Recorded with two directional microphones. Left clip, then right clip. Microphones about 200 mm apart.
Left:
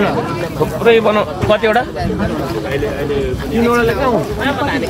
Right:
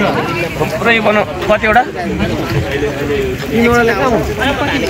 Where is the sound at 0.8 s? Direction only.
45° left (ahead or behind).